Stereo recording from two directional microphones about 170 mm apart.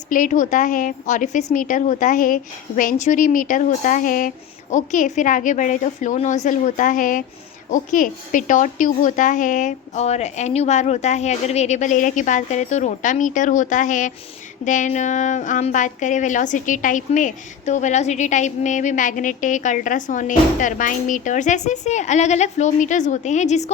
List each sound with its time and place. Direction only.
0.1 s speech: 50° left (ahead or behind)